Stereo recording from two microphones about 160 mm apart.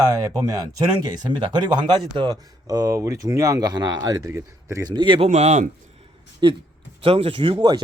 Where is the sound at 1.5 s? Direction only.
30° right (ahead or behind).